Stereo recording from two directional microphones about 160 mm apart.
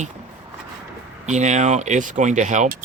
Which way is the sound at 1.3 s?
45° right (ahead or behind).